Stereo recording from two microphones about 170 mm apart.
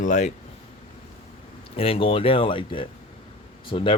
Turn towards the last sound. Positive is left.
turn(degrees=30)  # may be behind; listen again after turning